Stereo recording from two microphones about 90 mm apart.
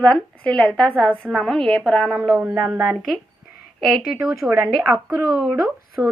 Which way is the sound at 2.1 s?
15° right (ahead or behind).